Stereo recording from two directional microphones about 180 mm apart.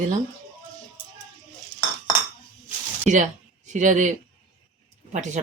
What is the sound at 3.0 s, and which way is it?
Speech, 40° right (ahead or behind).